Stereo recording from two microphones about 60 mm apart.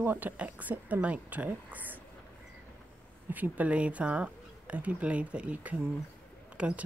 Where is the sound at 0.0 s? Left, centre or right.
Right.